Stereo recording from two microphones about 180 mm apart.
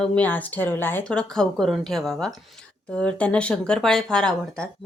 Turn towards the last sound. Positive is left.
turn(degrees=5)  # may be behind; listen again after turning